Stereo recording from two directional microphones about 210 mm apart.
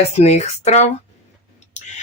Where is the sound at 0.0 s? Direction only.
30° left (ahead or behind).